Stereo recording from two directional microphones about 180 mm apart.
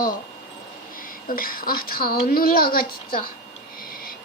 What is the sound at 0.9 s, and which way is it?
A woman's voice, 50° left (ahead or behind).